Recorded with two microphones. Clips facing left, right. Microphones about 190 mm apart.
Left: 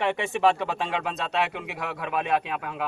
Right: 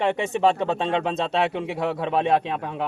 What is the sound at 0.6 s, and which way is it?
Speech, 25° right (ahead or behind).